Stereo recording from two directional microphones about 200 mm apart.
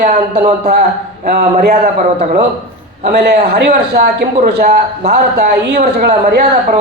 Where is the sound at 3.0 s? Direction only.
50° right (ahead or behind).